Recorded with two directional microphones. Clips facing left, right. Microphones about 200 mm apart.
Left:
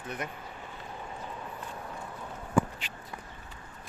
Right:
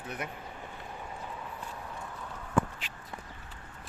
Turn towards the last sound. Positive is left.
turn(degrees=0)  # may be behind; listen again after turning